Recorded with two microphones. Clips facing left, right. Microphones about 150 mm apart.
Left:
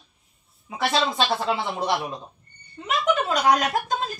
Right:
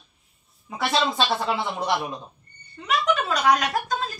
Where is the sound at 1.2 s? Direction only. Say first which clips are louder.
Even; centre (ahead or behind).